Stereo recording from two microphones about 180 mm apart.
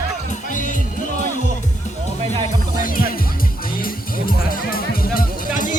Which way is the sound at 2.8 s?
50° left (ahead or behind).